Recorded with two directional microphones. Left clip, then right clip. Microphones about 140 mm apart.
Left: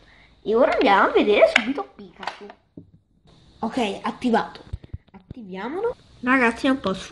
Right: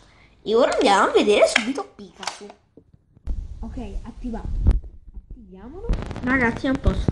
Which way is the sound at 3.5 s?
15° left (ahead or behind).